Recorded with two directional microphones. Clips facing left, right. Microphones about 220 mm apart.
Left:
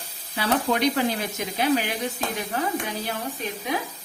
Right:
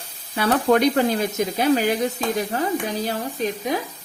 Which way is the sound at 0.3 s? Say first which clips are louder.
Right 6 dB; 55° right (ahead or behind).